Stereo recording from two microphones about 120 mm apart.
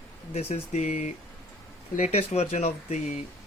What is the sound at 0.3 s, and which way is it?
Speech, 60° left (ahead or behind).